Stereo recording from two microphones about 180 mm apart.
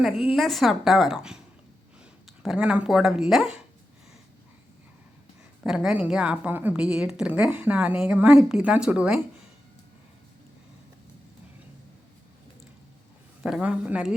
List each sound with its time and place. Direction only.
0.0 s a woman's voice: centre (ahead or behind)
2.4 s a woman's voice: 5° right (ahead or behind)
5.6 s a woman's voice: 5° right (ahead or behind)
13.4 s a woman's voice: 5° right (ahead or behind)